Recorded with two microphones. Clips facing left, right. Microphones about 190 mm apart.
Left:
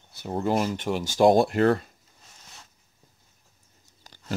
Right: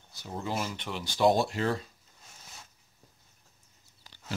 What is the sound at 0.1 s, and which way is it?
Speech, 55° left (ahead or behind).